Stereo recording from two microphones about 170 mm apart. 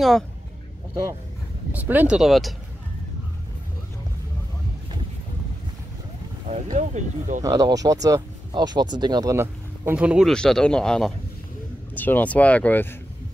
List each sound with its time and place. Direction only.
1.7 s speech: 10° right (ahead or behind)
6.5 s speech: 45° right (ahead or behind)
7.4 s speech: 20° right (ahead or behind); by 12.8 s 10° left (ahead or behind)